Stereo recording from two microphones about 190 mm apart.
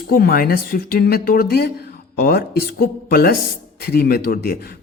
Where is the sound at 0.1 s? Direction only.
50° left (ahead or behind).